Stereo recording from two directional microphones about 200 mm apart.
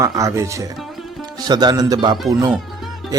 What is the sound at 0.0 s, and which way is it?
A man's voice, 15° right (ahead or behind).